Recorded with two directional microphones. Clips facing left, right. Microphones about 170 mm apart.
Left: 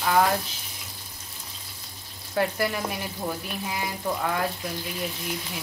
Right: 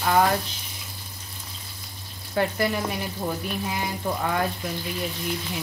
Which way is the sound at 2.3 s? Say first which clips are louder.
Right 1 dB; 5° left (ahead or behind).